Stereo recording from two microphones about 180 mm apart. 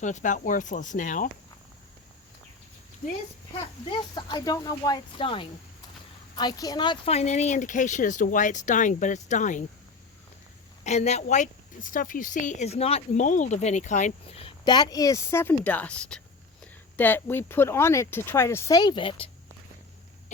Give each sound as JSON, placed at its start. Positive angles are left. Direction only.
{"t": 0.0, "sound": "speech", "side_deg": 45}
{"t": 3.8, "sound": "speech", "side_deg": 25}
{"t": 10.8, "sound": "speech", "side_deg": 40}